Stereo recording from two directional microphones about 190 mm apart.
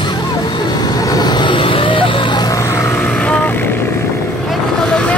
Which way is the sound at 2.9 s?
5° left (ahead or behind).